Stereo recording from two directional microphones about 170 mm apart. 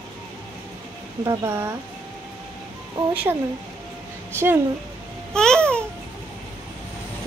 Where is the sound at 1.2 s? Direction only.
15° right (ahead or behind).